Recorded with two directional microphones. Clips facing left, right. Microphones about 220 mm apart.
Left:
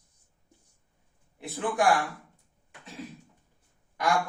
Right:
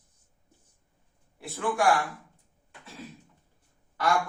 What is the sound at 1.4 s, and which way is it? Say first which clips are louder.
Speech: even; 20° left (ahead or behind).